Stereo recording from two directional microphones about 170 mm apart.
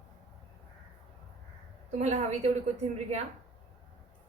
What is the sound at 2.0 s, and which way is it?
A woman's voice, 45° right (ahead or behind).